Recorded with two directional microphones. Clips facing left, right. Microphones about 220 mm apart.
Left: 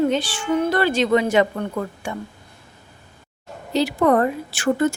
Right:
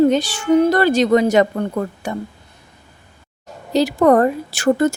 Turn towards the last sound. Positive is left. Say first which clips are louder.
# right 4 dB
turn(degrees=-40)  # may be behind; listen again after turning